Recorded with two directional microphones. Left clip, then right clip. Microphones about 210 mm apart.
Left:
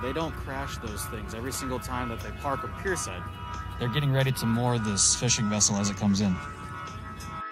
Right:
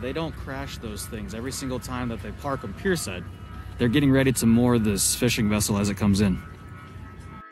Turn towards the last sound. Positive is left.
turn(degrees=60)  # may be behind; listen again after turning